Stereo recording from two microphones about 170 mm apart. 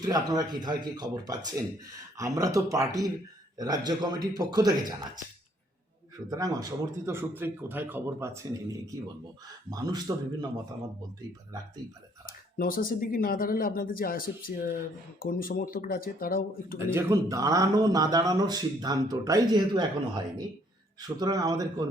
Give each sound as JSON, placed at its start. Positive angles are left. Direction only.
{"t": 0.0, "sound": "speech", "side_deg": -25}
{"t": 6.3, "sound": "a man's voice", "side_deg": -20}
{"t": 12.5, "sound": "speech", "side_deg": 55}
{"t": 16.7, "sound": "speech", "side_deg": -15}